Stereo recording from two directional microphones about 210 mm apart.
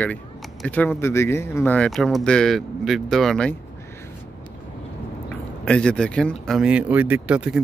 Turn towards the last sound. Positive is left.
turn(degrees=-5)  # may be behind; listen again after turning